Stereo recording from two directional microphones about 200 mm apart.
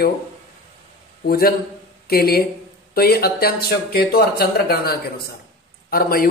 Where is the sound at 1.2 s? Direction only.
50° left (ahead or behind).